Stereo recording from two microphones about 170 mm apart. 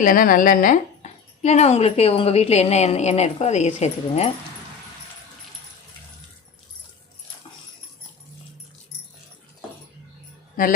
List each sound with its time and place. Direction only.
0.0 s speech: 55° left (ahead or behind)